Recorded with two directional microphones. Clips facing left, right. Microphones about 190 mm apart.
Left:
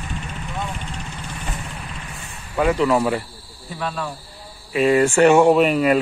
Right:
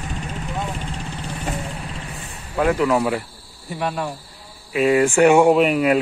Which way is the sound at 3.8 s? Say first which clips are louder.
Right 3 dB; 15° right (ahead or behind).